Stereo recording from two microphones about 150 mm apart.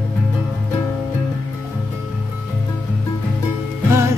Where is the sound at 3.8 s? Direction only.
20° right (ahead or behind).